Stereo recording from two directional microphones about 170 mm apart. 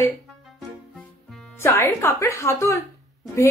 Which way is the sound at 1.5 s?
15° left (ahead or behind).